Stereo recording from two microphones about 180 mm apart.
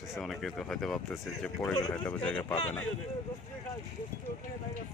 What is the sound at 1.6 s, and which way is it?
Speech, 20° left (ahead or behind).